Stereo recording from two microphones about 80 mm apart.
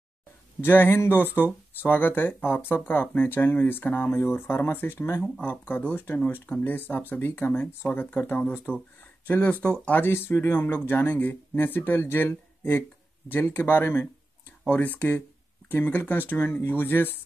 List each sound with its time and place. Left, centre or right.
0.6 s speech: left
9.9 s speech: left